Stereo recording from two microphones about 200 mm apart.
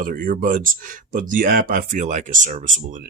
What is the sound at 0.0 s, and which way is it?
Speech, 45° right (ahead or behind).